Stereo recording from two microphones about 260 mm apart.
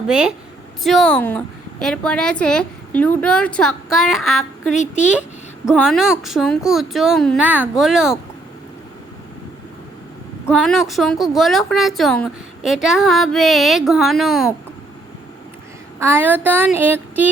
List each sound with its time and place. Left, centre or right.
0.1 s a woman's voice: centre
4.7 s speech: left
5.6 s a woman's voice: centre
10.5 s a woman's voice: centre
16.0 s child singing: centre